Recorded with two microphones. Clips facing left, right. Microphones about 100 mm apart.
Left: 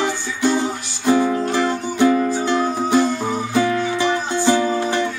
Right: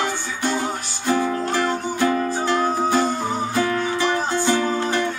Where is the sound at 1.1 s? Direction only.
20° left (ahead or behind).